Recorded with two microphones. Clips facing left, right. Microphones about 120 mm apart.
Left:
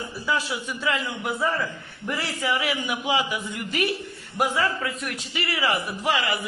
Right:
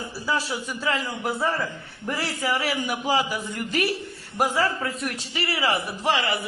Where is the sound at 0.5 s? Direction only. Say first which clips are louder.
Even; 35° right (ahead or behind).